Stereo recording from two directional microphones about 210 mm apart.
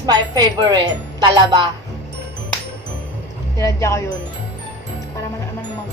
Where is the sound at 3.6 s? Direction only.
15° left (ahead or behind).